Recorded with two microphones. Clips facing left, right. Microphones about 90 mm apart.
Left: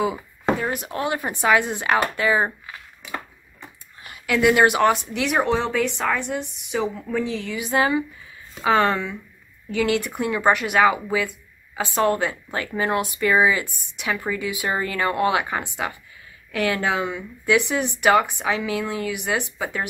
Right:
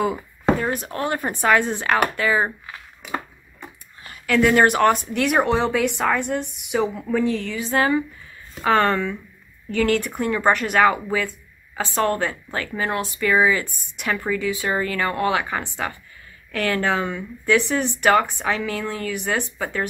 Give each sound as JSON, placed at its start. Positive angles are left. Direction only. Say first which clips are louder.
{"t": 0.0, "sound": "a sound", "louder": "right 2 dB", "side_deg": 0}
{"t": 1.4, "sound": "a woman's voice", "louder": "right 1 dB", "side_deg": 5}
{"t": 2.1, "sound": "speech", "louder": "even", "side_deg": 20}
{"t": 4.0, "sound": "a sound", "louder": "right 2 dB", "side_deg": 20}
{"t": 4.4, "sound": "speech", "louder": "right 1 dB", "side_deg": 5}
{"t": 7.5, "sound": "a woman's voice", "louder": "left 2 dB", "side_deg": 15}
{"t": 12.5, "sound": "speech", "louder": "left 2 dB", "side_deg": 20}
{"t": 13.7, "sound": "speech", "louder": "right 1 dB", "side_deg": 0}
{"t": 14.3, "sound": "a woman's voice", "louder": "right 2 dB", "side_deg": 15}